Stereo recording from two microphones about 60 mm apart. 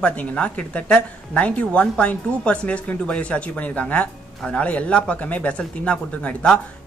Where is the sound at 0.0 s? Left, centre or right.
Left.